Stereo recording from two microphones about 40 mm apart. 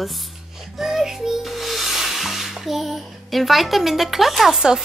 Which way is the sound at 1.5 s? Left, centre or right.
Centre.